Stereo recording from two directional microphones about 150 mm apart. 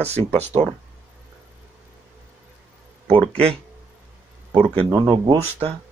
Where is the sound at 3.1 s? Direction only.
40° right (ahead or behind).